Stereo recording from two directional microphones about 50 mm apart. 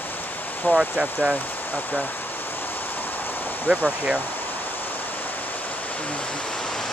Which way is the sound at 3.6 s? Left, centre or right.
Right.